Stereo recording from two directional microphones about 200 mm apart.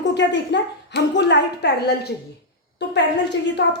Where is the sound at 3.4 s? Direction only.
60° left (ahead or behind).